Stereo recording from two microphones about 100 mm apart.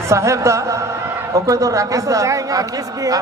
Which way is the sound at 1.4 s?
35° right (ahead or behind).